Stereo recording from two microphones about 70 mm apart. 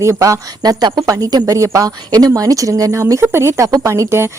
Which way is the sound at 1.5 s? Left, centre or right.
Right.